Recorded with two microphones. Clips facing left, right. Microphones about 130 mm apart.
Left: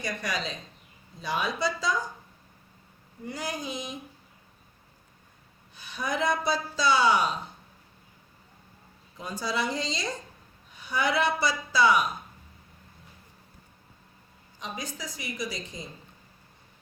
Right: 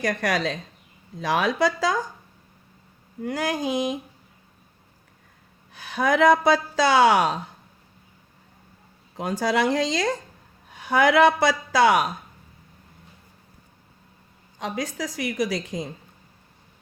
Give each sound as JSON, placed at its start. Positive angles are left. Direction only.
{"t": 0.0, "sound": "a woman's voice", "side_deg": -90}
{"t": 3.2, "sound": "a woman's voice", "side_deg": -90}
{"t": 5.7, "sound": "a woman's voice", "side_deg": -90}
{"t": 9.1, "sound": "a woman's voice", "side_deg": -90}
{"t": 14.6, "sound": "a woman's voice", "side_deg": -90}